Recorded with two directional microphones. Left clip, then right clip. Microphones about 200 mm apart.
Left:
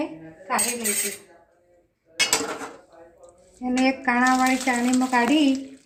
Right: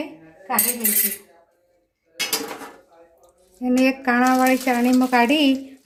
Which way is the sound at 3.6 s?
55° right (ahead or behind).